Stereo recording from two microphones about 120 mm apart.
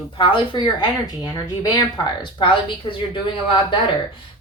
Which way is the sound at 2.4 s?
45° left (ahead or behind).